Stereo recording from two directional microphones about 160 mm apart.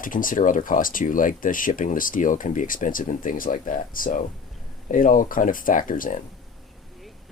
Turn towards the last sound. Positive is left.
turn(degrees=55)  # may be behind; listen again after turning